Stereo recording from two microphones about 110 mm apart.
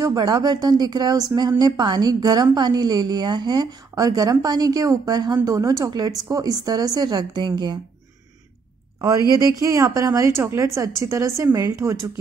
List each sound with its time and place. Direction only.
0.0 s a woman's voice: 35° right (ahead or behind)
9.6 s a woman's voice: 30° right (ahead or behind)